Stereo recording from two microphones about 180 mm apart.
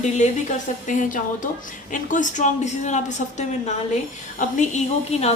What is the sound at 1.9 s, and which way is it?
Speech, 45° left (ahead or behind).